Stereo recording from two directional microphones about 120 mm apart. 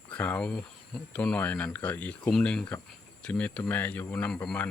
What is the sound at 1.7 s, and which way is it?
Speech, 10° left (ahead or behind).